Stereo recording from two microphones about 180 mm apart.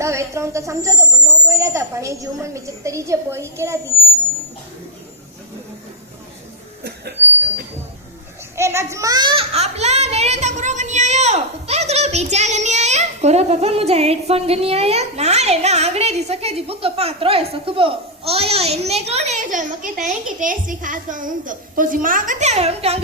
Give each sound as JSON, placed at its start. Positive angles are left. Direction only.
{"t": 0.0, "sound": "a woman's voice", "side_deg": -15}
{"t": 8.5, "sound": "a child's voice", "side_deg": -15}